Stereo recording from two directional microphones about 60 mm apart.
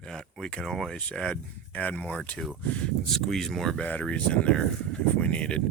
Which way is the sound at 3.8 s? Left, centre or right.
Left.